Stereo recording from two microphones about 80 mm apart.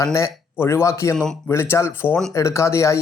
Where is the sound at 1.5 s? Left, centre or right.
Left.